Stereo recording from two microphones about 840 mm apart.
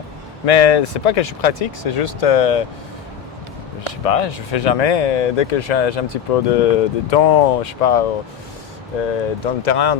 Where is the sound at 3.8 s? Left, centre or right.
Left.